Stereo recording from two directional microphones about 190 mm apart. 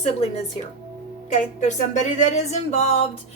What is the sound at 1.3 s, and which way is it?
Speech, 40° left (ahead or behind).